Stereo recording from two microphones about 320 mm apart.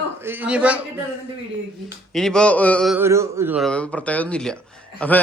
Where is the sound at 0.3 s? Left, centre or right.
Centre.